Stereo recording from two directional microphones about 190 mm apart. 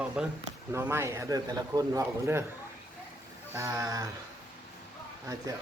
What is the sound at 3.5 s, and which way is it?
Speech, 15° right (ahead or behind).